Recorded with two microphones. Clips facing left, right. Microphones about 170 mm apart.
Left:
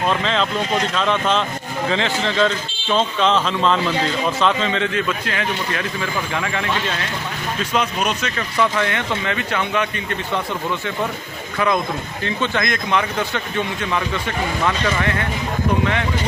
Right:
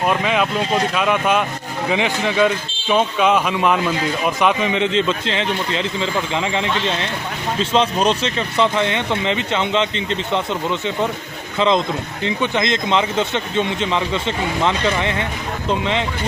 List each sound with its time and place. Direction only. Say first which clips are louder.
0.0 s speech: right 2 dB; 10° right (ahead or behind)